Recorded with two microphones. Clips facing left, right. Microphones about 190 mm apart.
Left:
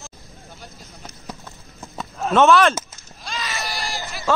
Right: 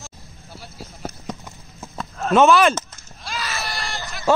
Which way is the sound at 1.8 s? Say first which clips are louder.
Left 1 dB; centre (ahead or behind).